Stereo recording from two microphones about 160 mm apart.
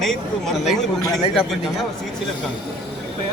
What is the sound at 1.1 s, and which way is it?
Speech, centre (ahead or behind).